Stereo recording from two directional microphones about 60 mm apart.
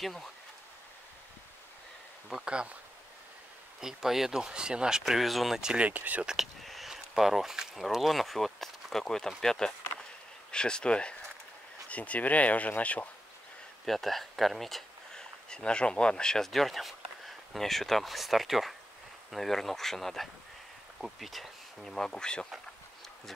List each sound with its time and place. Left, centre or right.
0.0 s speech: centre
2.2 s speech: centre
3.8 s speech: centre
5.6 s speech: centre
5.9 s speech: right
6.2 s speech: centre; by 13.1 s left
13.8 s speech: centre
15.5 s speech: centre